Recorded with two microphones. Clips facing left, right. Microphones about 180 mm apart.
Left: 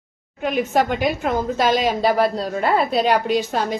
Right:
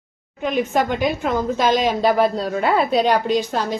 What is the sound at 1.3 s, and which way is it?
Speech, 45° left (ahead or behind).